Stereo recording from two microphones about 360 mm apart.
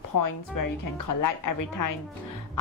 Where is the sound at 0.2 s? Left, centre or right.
Left.